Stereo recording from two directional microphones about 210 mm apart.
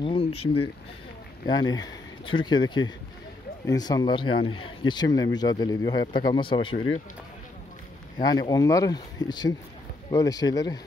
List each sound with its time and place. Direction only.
0.0 s a sound: 25° left (ahead or behind)
1.4 s speech: 20° left (ahead or behind)
8.2 s speech: 20° left (ahead or behind)